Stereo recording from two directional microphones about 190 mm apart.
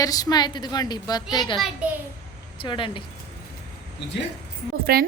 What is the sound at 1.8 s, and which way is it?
Speech, 5° right (ahead or behind).